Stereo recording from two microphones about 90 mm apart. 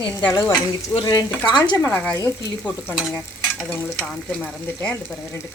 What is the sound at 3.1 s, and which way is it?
Stir, 10° left (ahead or behind).